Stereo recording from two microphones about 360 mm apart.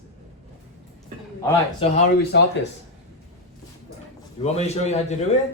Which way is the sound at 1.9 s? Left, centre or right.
Left.